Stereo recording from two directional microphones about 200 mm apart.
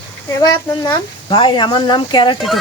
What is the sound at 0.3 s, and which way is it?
Speech, 20° left (ahead or behind).